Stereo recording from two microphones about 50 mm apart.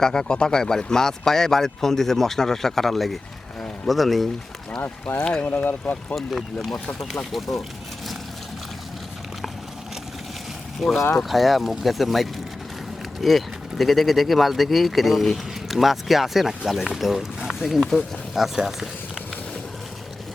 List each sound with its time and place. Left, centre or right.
0.0 s speech: centre
5.1 s speech: centre
5.5 s speech: left
6.1 s speech: centre
10.8 s speech: centre